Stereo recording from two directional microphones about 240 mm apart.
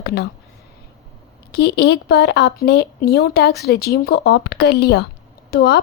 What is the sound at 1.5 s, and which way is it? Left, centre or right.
A woman's voice, left.